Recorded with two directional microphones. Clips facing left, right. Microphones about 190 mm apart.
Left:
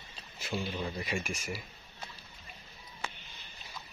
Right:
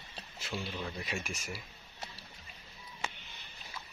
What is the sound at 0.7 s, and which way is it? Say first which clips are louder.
Speech: left 3 dB; 15° left (ahead or behind).